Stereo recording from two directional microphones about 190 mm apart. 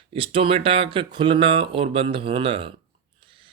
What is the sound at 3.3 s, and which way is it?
Gasp, 25° right (ahead or behind).